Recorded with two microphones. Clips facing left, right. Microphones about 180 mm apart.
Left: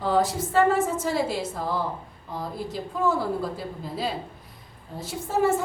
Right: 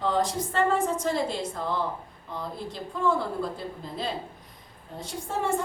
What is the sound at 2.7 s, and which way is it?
Speech, 5° left (ahead or behind).